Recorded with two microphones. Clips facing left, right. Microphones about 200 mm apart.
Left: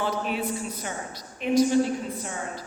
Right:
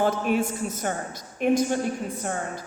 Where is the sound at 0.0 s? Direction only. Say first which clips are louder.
Right 5 dB; 50° right (ahead or behind).